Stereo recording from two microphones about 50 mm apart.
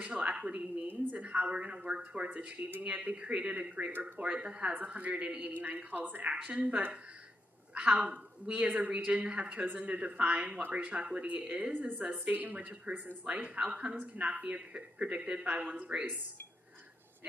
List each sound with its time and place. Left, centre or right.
0.0 s a woman's voice: right
2.2 s speech: right
3.2 s a woman's voice: right
5.1 s a woman's voice: centre
5.4 s speech: right
6.3 s a woman's voice: right
11.9 s a woman's voice: right